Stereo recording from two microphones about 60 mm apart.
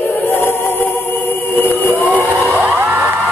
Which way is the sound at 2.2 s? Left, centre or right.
Left.